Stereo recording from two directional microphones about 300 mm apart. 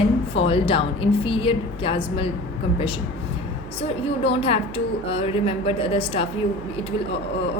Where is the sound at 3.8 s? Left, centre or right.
Centre.